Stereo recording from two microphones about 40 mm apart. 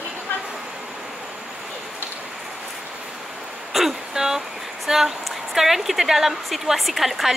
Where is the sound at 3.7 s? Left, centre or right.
Centre.